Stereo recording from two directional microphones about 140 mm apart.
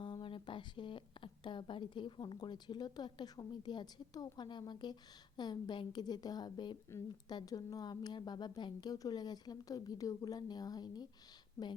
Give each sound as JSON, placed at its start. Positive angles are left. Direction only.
{"t": 0.0, "sound": "a woman's voice", "side_deg": 35}